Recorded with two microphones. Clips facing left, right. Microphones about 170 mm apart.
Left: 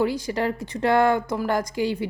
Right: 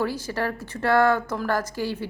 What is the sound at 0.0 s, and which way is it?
Speech, 15° left (ahead or behind).